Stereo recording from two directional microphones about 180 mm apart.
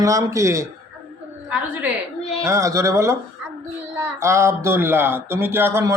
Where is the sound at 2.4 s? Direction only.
15° right (ahead or behind).